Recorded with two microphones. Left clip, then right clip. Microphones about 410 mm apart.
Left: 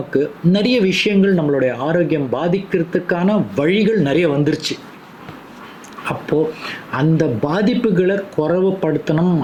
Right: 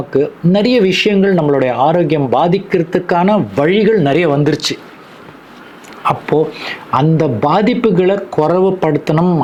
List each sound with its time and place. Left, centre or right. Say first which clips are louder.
0.1 s speech: right 4 dB; right
6.9 s speech: right 5 dB; right